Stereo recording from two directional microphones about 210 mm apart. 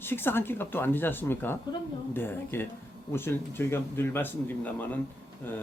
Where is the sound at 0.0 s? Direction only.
10° left (ahead or behind).